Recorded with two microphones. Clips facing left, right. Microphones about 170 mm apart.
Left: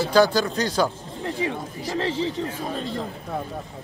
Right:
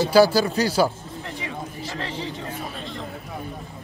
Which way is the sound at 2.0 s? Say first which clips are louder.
Left 8 dB; 30° left (ahead or behind).